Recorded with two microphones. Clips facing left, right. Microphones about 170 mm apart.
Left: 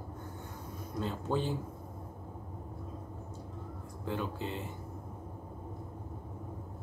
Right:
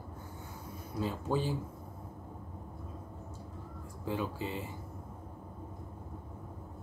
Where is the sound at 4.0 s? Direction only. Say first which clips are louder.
Right 1 dB; 5° right (ahead or behind).